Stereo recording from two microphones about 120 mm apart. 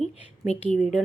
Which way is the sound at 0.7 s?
Centre (ahead or behind).